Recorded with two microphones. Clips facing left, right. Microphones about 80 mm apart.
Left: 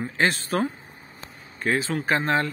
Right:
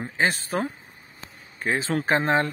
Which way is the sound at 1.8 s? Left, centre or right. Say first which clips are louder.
Right 1 dB; right.